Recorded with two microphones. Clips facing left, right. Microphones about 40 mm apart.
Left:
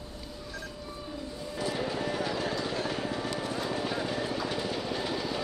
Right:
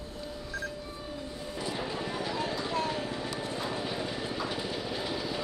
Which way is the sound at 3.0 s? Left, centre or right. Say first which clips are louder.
Left 2 dB; left.